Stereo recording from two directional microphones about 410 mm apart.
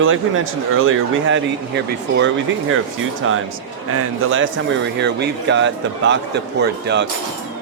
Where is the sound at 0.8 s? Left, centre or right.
Right.